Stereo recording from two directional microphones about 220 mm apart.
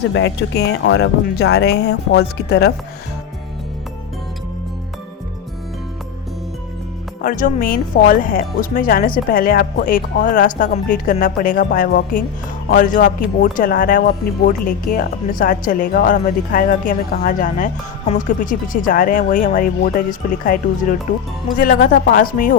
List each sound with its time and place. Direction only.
0.1 s speech: 55° left (ahead or behind)
7.2 s speech: 40° left (ahead or behind)